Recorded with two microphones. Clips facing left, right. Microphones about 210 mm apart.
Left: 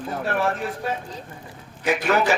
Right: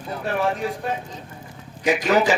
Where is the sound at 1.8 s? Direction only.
15° right (ahead or behind).